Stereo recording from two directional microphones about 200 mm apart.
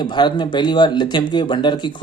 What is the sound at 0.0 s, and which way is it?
Speech, 20° left (ahead or behind).